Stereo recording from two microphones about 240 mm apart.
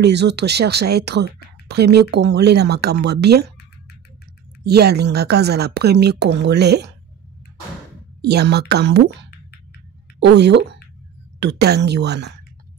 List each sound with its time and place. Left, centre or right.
0.0 s speech: right
4.6 s speech: right
8.2 s speech: right